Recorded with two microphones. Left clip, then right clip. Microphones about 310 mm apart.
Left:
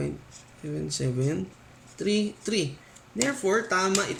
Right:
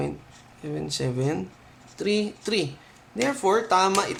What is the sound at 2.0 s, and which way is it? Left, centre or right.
Speech, centre.